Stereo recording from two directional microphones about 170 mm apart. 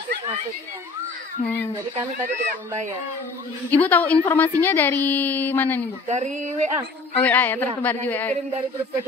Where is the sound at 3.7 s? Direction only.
10° left (ahead or behind).